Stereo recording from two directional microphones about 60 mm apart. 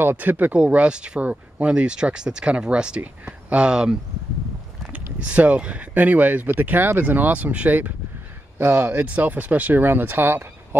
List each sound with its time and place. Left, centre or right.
0.0 s speech: right
0.6 s speech: centre
4.9 s speech: right
8.5 s speech: right